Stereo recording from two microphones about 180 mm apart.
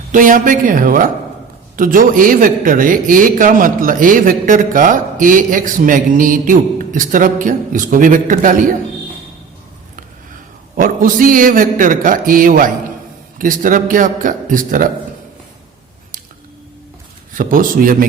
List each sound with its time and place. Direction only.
0.1 s a man's voice: 50° right (ahead or behind)
10.8 s a man's voice: 50° right (ahead or behind)
17.3 s a man's voice: 50° right (ahead or behind)